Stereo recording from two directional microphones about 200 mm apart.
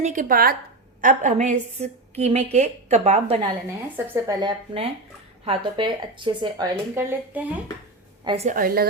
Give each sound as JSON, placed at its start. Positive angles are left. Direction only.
{"t": 0.0, "sound": "a woman's voice", "side_deg": -40}
{"t": 3.9, "sound": "a woman's voice", "side_deg": -15}
{"t": 6.9, "sound": "speech", "side_deg": -10}
{"t": 8.2, "sound": "a woman's voice", "side_deg": -25}
{"t": 8.4, "sound": "speech", "side_deg": -45}